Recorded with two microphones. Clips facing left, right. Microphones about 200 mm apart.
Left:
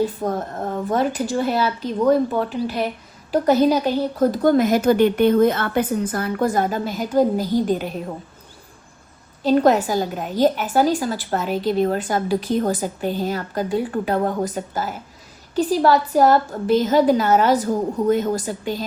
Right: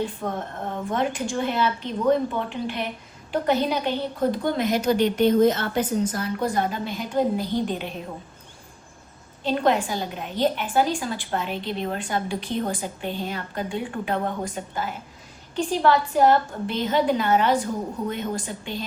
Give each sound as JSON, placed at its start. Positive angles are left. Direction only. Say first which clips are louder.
{"t": 0.2, "sound": "speech", "louder": "left 6 dB", "side_deg": 20}
{"t": 0.9, "sound": "a woman's voice", "louder": "left 4 dB", "side_deg": 40}
{"t": 9.4, "sound": "a woman's voice", "louder": "left 6 dB", "side_deg": 40}